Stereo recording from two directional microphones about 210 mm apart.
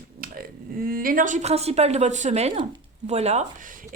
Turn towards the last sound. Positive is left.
turn(degrees=-40)  # may be behind; listen again after turning